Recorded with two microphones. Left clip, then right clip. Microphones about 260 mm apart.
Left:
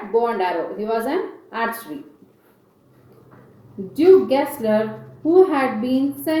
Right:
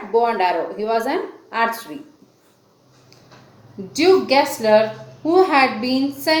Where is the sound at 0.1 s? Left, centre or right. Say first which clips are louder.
Right 2 dB; centre.